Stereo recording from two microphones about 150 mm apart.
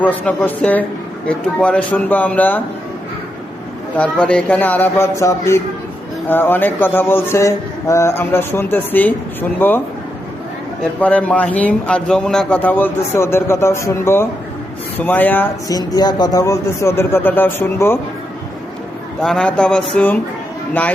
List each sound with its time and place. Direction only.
0.0 s a man's voice: 10° left (ahead or behind)
3.9 s a man's voice: 10° left (ahead or behind)
11.0 s a man's voice: 10° left (ahead or behind)
15.7 s a man's voice: 25° left (ahead or behind)
19.2 s a man's voice: 5° left (ahead or behind)